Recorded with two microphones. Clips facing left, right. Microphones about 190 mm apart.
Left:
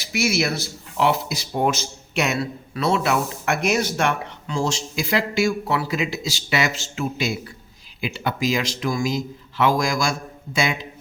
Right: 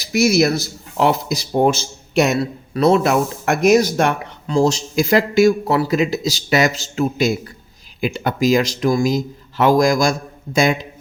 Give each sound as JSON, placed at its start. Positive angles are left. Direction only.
{"t": 0.0, "sound": "speech", "side_deg": -40}